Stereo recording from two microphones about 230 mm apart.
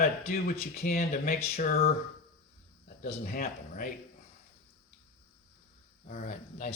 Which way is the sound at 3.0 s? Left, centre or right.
Left.